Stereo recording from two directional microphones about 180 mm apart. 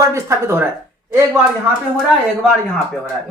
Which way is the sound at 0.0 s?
15° right (ahead or behind).